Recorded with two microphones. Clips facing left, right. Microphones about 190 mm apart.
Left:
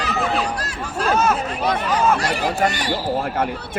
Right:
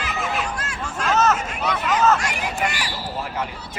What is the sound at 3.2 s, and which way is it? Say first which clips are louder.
Speech: left 6 dB; 55° left (ahead or behind).